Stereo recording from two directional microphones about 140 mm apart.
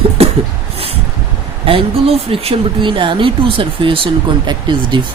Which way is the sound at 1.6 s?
40° right (ahead or behind).